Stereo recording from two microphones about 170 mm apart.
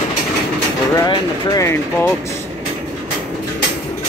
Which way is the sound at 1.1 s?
20° left (ahead or behind).